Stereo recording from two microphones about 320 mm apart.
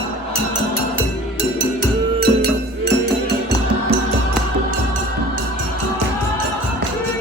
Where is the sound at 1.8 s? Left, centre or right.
Right.